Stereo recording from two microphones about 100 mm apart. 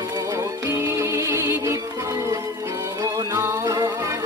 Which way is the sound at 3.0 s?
30° right (ahead or behind).